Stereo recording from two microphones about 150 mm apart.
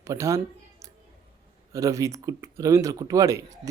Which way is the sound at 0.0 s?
20° right (ahead or behind).